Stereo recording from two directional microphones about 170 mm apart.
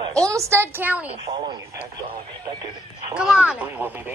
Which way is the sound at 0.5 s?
15° right (ahead or behind).